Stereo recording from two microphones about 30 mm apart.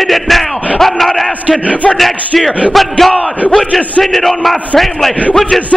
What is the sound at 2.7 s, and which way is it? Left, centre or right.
Speech, centre.